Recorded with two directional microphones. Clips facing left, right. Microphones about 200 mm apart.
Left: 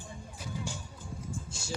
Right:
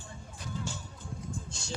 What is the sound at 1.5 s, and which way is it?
Music, 10° left (ahead or behind).